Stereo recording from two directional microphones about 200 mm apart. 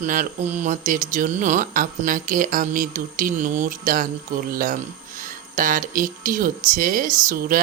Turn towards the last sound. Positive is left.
turn(degrees=-40)  # may be behind; listen again after turning